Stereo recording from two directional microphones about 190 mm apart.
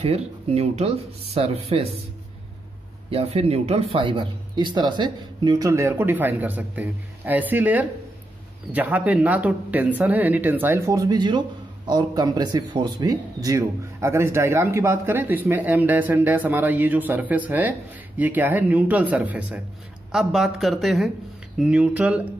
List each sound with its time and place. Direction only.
0.0 s speech: 35° right (ahead or behind)
3.1 s a man's voice: 30° right (ahead or behind); by 22.2 s 5° right (ahead or behind)